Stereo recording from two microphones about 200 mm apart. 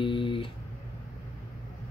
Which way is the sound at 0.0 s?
25° left (ahead or behind).